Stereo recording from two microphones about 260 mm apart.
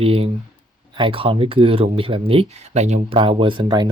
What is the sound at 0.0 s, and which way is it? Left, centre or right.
Speech, right.